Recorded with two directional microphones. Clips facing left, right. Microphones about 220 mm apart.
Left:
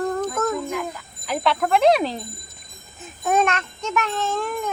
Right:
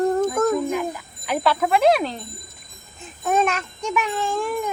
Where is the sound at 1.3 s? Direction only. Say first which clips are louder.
Right 1 dB; 5° right (ahead or behind).